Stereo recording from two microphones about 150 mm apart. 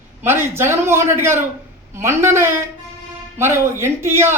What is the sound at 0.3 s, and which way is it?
A man's voice, 15° right (ahead or behind).